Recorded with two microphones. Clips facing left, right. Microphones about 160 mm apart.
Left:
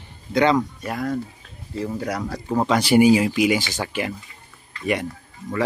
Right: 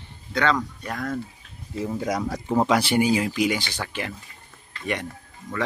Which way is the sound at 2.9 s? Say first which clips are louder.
Left 6 dB; 10° left (ahead or behind).